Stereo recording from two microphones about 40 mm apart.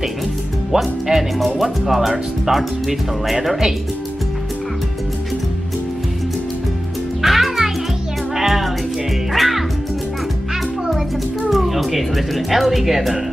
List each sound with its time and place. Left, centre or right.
0.7 s speech: centre
7.2 s music: centre
11.5 s speech: centre